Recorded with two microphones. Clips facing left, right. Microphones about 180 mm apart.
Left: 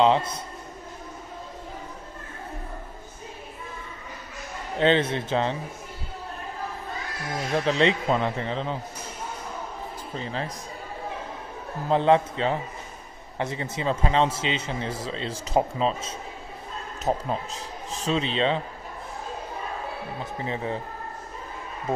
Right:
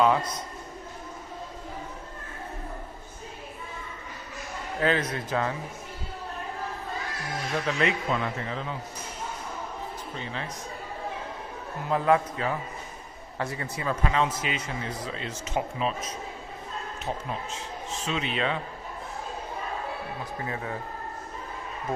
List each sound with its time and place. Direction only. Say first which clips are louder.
0.0 s a man's voice: left 3 dB; 25° left (ahead or behind)
4.7 s a man's voice: left 5 dB; 25° left (ahead or behind)
7.5 s a man's voice: left 5 dB; 30° left (ahead or behind)
10.1 s a man's voice: left 6 dB; 35° left (ahead or behind)
11.9 s a man's voice: left 3 dB; 25° left (ahead or behind)
20.4 s a man's voice: left 5 dB; 25° left (ahead or behind)